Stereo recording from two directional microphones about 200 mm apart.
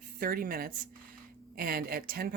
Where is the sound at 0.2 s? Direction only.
45° right (ahead or behind).